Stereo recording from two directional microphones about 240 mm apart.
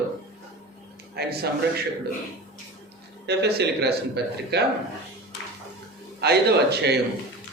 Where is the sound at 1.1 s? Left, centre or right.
Right.